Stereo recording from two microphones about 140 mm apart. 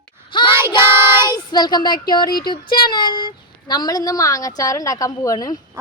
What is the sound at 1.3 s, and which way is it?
Speech, 30° left (ahead or behind).